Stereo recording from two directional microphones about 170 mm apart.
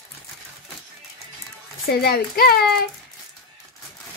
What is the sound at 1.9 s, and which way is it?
Speech, 65° left (ahead or behind).